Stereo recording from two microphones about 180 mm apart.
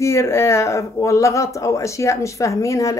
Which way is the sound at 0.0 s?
15° left (ahead or behind).